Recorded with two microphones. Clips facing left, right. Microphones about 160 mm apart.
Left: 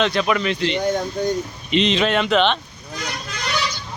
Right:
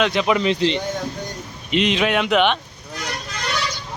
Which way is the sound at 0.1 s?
20° right (ahead or behind).